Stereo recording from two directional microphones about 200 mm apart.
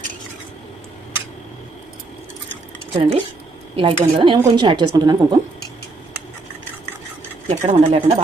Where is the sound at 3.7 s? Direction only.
25° right (ahead or behind).